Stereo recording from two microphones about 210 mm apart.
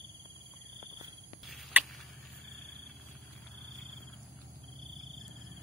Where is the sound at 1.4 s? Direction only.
Centre (ahead or behind).